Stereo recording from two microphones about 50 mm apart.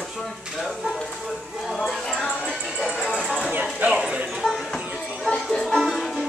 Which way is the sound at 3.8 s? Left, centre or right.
Right.